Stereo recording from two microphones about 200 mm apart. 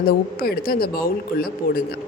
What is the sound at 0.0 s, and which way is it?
A woman's voice, 50° left (ahead or behind).